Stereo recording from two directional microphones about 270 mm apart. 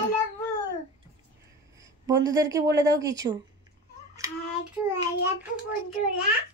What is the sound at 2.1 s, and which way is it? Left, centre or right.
A woman's voice, centre.